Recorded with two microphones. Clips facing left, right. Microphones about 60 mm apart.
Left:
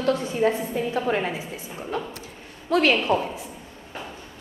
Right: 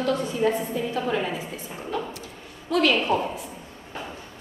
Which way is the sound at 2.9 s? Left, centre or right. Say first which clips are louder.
Left 1 dB; centre.